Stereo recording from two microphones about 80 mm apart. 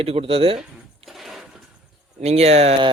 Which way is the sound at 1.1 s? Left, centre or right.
Centre.